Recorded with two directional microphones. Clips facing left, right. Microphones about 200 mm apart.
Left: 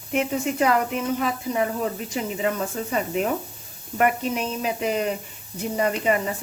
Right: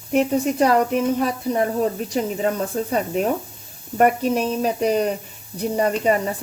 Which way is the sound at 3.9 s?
40° right (ahead or behind).